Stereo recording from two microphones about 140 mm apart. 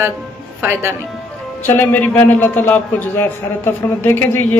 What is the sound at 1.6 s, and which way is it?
A man's voice, 15° left (ahead or behind).